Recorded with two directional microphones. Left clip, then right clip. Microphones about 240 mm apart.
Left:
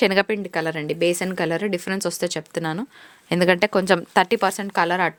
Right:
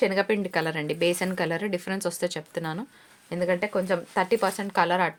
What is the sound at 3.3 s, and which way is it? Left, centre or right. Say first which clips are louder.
A woman's voice: left 8 dB; left.